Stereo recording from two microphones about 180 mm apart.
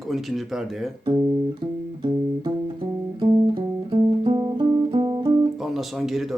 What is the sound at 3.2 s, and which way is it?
Music, 25° right (ahead or behind).